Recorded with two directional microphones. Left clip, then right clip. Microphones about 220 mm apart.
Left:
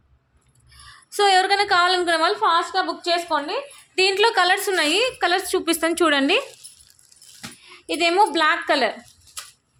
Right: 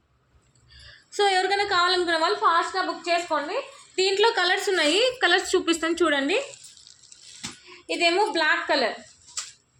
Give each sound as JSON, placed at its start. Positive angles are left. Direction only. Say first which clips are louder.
{"t": 0.7, "sound": "a sound", "louder": "left 3 dB", "side_deg": 35}
{"t": 3.1, "sound": "a woman's voice", "louder": "left 1 dB", "side_deg": 45}
{"t": 5.9, "sound": "a woman's voice", "louder": "left 5 dB", "side_deg": 45}
{"t": 7.9, "sound": "a woman's voice", "louder": "left 4 dB", "side_deg": 50}